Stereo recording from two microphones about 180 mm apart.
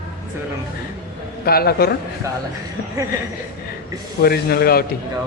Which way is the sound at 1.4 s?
60° left (ahead or behind).